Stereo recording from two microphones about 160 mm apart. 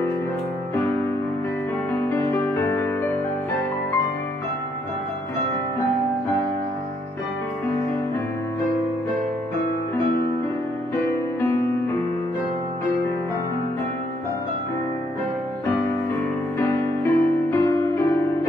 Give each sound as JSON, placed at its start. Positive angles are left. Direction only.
{"t": 2.0, "sound": "music", "side_deg": 15}
{"t": 16.5, "sound": "music", "side_deg": 15}